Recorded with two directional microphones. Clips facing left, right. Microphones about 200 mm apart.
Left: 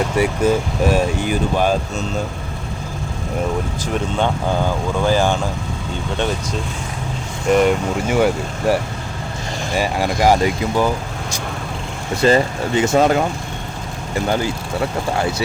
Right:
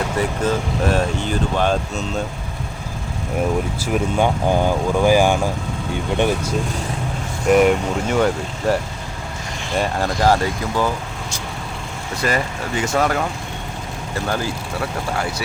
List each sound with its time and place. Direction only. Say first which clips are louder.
0.2 s speech: left 4 dB; 10° left (ahead or behind)
3.9 s speech: right 2 dB; 10° right (ahead or behind)
7.5 s speech: right 1 dB; centre (ahead or behind)
8.1 s speech: left 2 dB; 10° left (ahead or behind)
12.1 s speech: left 7 dB; 25° left (ahead or behind)
14.3 s speech: left 3 dB; 20° left (ahead or behind)